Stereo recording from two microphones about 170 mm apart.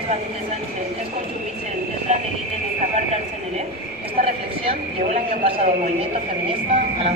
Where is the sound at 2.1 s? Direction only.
40° right (ahead or behind).